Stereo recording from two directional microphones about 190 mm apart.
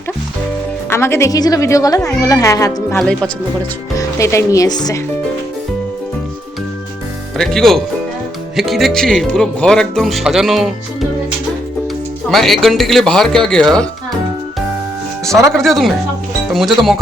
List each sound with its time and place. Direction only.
0.9 s a woman's voice: 15° left (ahead or behind)
7.3 s speech: centre (ahead or behind)
12.3 s speech: centre (ahead or behind)
15.5 s speech: centre (ahead or behind)